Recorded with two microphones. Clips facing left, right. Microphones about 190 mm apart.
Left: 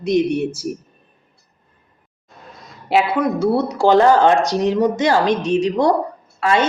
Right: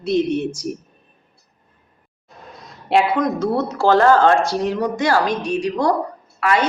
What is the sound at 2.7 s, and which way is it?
A woman's voice, 5° left (ahead or behind).